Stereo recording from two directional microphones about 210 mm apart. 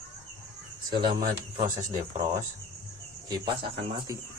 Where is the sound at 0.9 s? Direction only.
20° right (ahead or behind).